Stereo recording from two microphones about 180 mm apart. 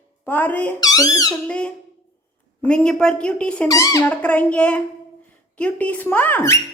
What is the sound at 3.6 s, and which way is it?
Speech, 20° left (ahead or behind).